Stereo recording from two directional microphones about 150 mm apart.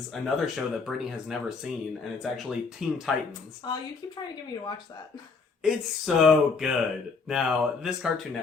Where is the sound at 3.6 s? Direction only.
30° left (ahead or behind).